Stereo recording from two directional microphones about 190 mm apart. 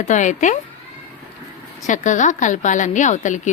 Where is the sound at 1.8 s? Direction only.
40° left (ahead or behind).